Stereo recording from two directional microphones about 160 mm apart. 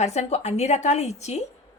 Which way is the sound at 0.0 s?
45° left (ahead or behind).